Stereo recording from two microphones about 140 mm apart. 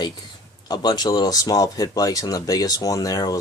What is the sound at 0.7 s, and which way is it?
Speech, 30° left (ahead or behind).